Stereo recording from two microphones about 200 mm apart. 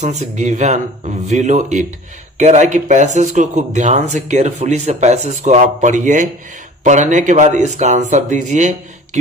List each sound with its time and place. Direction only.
0.0 s speech: 35° right (ahead or behind)